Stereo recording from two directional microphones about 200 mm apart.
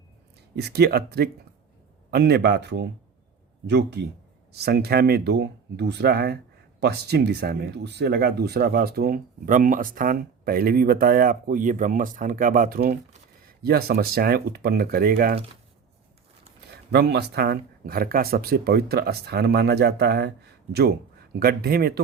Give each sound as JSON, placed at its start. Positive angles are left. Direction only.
{"t": 0.5, "sound": "speech", "side_deg": -55}
{"t": 16.7, "sound": "speech", "side_deg": -55}